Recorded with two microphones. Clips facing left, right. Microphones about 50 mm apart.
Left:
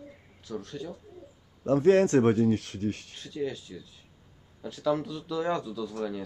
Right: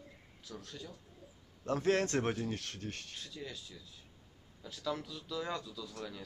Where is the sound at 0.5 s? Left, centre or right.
Centre.